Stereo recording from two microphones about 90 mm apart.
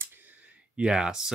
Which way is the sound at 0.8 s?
5° right (ahead or behind).